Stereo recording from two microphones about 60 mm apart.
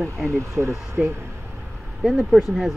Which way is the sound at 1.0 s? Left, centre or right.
Centre.